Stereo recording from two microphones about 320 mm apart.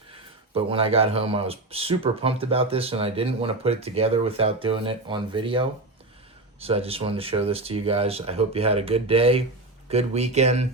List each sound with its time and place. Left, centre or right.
0.5 s speech: centre